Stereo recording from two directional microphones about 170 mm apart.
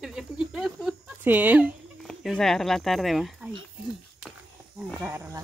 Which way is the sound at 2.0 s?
Centre (ahead or behind).